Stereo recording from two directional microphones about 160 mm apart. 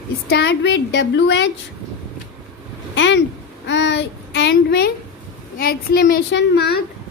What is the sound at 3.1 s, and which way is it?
A child's voice, 90° left.